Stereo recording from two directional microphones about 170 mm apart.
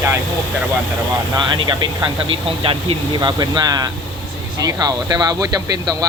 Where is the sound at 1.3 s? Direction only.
25° right (ahead or behind).